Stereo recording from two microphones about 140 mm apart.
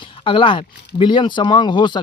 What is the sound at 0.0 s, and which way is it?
Speech, 40° left (ahead or behind).